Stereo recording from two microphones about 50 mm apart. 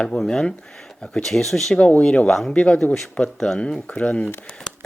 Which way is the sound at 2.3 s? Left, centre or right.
Centre.